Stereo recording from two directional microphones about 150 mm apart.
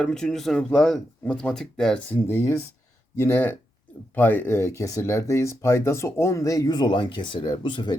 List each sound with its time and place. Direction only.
0.0 s speech: 5° left (ahead or behind); by 7.9 s 30° left (ahead or behind)